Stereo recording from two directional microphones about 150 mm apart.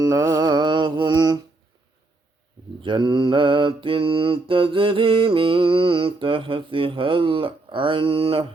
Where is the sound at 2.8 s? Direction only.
35° right (ahead or behind).